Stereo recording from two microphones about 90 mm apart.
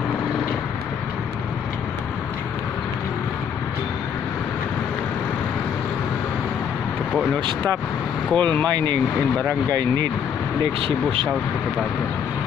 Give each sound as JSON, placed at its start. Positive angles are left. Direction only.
{"t": 7.3, "sound": "speech", "side_deg": -65}
{"t": 8.4, "sound": "speech", "side_deg": 20}
{"t": 10.6, "sound": "speech", "side_deg": -80}